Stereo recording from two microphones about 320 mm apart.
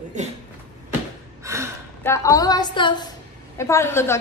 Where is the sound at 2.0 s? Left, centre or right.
Centre.